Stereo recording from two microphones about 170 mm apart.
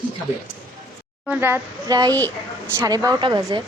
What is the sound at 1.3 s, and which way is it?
A woman's voice, 10° right (ahead or behind).